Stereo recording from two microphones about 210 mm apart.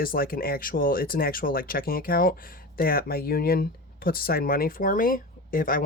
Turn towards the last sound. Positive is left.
turn(degrees=40)  # may be behind; listen again after turning